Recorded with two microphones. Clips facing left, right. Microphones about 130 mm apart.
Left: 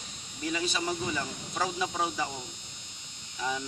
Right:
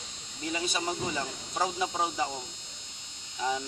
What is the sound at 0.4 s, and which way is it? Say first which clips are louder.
Speech: left 1 dB; 25° right (ahead or behind).